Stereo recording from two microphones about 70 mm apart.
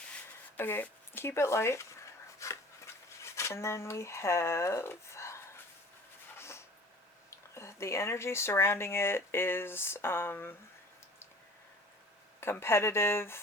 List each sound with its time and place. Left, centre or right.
0.5 s speech: left
2.4 s a sound: left
7.3 s speech: left
12.4 s speech: left